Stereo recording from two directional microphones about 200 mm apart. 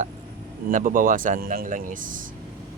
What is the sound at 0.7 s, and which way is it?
Speech, 40° right (ahead or behind).